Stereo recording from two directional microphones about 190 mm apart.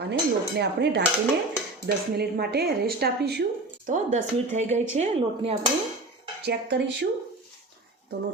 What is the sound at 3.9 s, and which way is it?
Speech, 40° right (ahead or behind).